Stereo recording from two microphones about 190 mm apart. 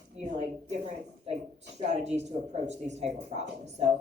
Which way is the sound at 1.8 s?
35° right (ahead or behind).